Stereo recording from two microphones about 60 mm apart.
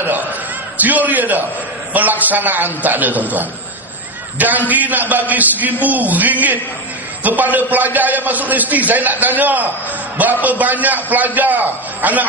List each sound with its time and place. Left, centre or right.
0.7 s a man's voice: right